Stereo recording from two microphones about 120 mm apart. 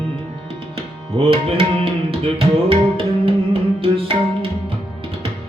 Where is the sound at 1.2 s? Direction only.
45° right (ahead or behind).